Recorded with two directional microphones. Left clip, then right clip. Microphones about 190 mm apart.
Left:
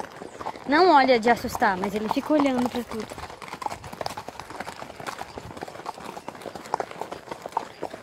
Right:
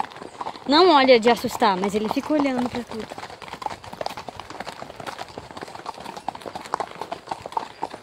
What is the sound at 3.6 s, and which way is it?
Clip-clop, 25° left (ahead or behind).